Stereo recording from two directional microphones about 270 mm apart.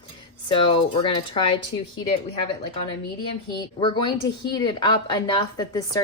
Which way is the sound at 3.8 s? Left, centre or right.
Centre.